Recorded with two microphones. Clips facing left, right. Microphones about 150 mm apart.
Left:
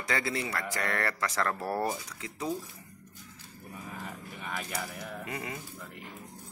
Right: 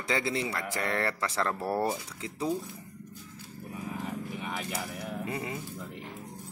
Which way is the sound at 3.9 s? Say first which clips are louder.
Right 7 dB; 10° right (ahead or behind).